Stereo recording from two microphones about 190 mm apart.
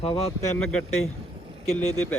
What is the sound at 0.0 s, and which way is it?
Speech, 30° left (ahead or behind).